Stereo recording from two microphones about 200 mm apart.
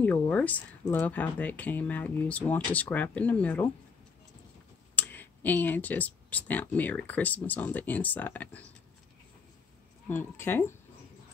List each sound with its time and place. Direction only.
0.0 s speech: 10° left (ahead or behind)
4.9 s speech: 10° left (ahead or behind)
10.0 s speech: 10° left (ahead or behind)